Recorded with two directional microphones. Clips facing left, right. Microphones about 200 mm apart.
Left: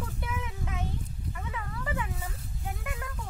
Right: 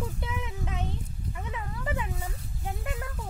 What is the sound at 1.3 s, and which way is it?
Snake, 25° right (ahead or behind).